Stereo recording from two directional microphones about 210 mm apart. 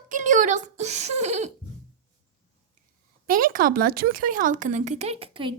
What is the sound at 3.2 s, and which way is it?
Speech, 40° right (ahead or behind).